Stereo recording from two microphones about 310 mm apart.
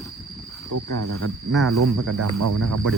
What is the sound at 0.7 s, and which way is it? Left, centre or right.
Speech, right.